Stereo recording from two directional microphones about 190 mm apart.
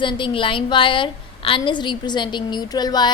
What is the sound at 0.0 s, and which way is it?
A woman's voice, 25° left (ahead or behind).